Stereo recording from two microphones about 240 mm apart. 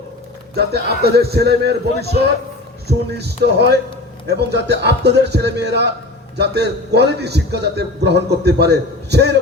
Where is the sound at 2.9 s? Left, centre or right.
Right.